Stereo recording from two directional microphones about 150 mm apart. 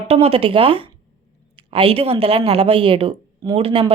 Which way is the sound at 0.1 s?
40° right (ahead or behind).